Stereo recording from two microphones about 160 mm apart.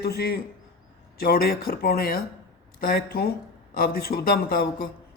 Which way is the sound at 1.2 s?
70° left (ahead or behind).